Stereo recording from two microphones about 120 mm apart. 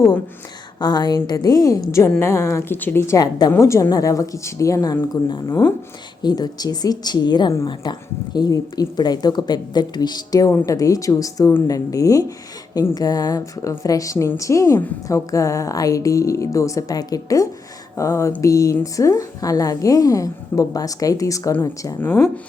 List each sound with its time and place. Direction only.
0.8 s a woman's voice: 35° left (ahead or behind)